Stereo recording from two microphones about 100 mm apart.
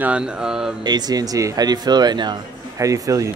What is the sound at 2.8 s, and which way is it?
Speech, 35° right (ahead or behind).